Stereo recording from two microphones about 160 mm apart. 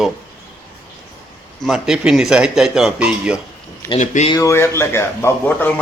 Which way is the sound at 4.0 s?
50° left (ahead or behind).